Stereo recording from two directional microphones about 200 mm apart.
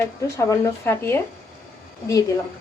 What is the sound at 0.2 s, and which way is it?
A woman's voice, 15° left (ahead or behind).